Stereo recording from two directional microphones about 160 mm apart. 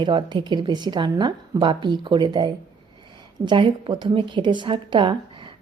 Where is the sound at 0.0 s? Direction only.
30° right (ahead or behind).